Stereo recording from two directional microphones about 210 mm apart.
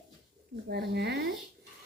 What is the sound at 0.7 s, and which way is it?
Speech, 50° right (ahead or behind).